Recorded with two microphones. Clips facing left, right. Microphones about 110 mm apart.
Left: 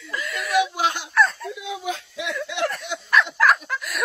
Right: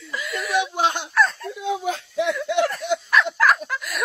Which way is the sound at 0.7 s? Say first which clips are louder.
Right 2 dB; 25° right (ahead or behind).